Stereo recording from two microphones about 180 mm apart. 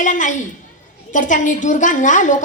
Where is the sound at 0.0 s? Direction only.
45° left (ahead or behind).